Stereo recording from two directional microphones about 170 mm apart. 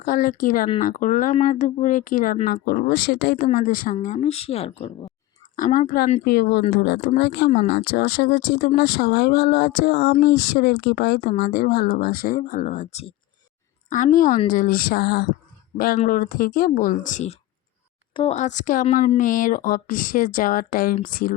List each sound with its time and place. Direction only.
0.0 s a woman's voice: 55° left (ahead or behind)
4.0 s speech: 40° left (ahead or behind)
5.5 s a woman's voice: 50° left (ahead or behind)
12.4 s a woman's voice: 50° left (ahead or behind)
13.9 s a woman's voice: 50° left (ahead or behind)
16.0 s a woman's voice: 55° left (ahead or behind)
18.1 s speech: 30° left (ahead or behind)
18.3 s a woman's voice: 45° left (ahead or behind)